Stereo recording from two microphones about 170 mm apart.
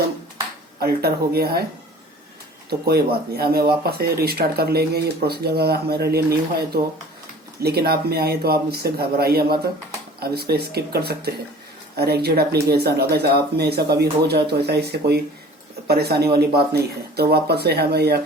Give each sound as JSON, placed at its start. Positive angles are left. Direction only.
{"t": 0.8, "sound": "speech", "side_deg": -65}
{"t": 2.6, "sound": "speech", "side_deg": -70}
{"t": 7.6, "sound": "speech", "side_deg": -65}